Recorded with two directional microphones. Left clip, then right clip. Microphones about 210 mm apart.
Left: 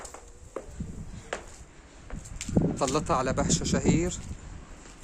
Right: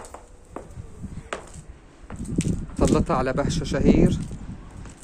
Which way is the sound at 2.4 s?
55° right (ahead or behind).